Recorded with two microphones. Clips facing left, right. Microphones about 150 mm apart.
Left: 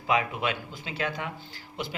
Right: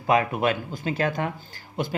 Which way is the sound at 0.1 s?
45° right (ahead or behind).